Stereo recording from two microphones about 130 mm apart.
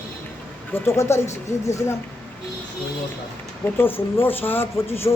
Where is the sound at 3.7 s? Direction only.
15° left (ahead or behind).